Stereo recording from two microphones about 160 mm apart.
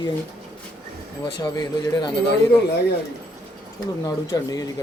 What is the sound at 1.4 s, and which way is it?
Speech, 25° left (ahead or behind).